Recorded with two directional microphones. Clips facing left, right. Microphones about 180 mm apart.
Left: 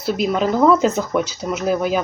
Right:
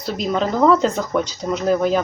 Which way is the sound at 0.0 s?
5° left (ahead or behind).